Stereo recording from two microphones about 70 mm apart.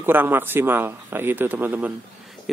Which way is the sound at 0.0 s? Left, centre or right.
Right.